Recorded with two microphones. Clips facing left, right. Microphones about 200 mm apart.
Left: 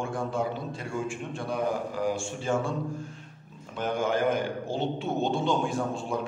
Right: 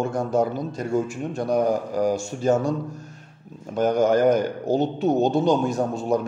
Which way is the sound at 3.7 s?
40° right (ahead or behind).